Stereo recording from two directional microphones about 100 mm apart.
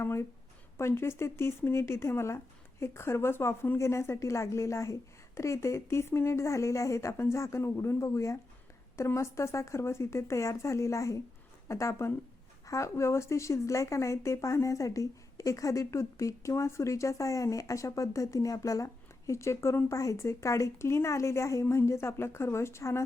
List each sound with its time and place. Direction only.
0.0 s a woman's voice: 25° left (ahead or behind)